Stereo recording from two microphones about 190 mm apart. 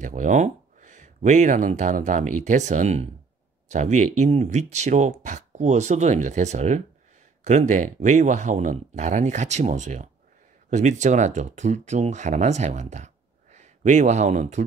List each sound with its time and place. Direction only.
0.0 s speech: 40° right (ahead or behind)